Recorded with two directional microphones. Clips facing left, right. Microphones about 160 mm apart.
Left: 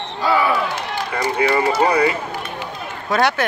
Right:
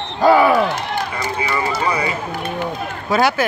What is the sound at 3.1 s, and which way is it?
Speech, centre (ahead or behind).